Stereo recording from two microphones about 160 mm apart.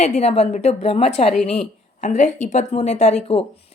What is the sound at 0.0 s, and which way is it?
Speech, 40° left (ahead or behind).